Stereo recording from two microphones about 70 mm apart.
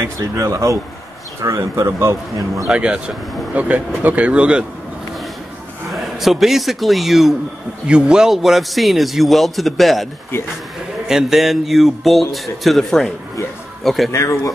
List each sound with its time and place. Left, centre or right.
0.4 s speech: right
2.6 s speech: centre
3.5 s speech: right
5.9 s a man's voice: centre
11.1 s a man's voice: centre
14.1 s speech: left